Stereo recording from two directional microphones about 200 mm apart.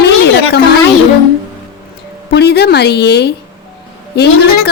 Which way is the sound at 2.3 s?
55° left (ahead or behind).